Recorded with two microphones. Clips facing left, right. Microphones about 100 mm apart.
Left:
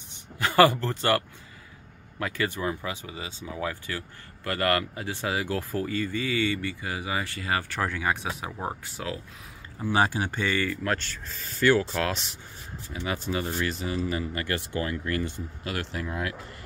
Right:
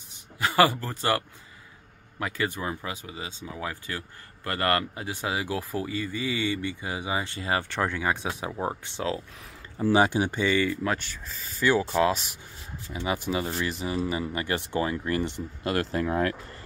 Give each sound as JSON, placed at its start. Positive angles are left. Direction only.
{"t": 0.6, "sound": "speech", "side_deg": -10}
{"t": 2.1, "sound": "speech", "side_deg": -20}
{"t": 8.5, "sound": "speech", "side_deg": -5}
{"t": 8.8, "sound": "speech", "side_deg": -25}
{"t": 10.4, "sound": "speech", "side_deg": 50}
{"t": 10.8, "sound": "speech", "side_deg": -15}
{"t": 13.0, "sound": "speech", "side_deg": -15}
{"t": 15.6, "sound": "speech", "side_deg": -40}